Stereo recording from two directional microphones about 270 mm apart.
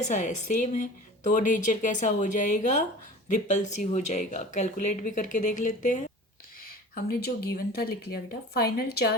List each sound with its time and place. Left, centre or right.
0.0 s a woman's voice: left